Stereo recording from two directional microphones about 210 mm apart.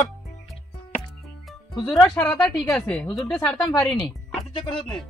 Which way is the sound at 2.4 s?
5° left (ahead or behind).